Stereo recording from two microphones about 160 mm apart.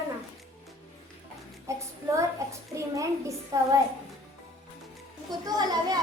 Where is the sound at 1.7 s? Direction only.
20° right (ahead or behind).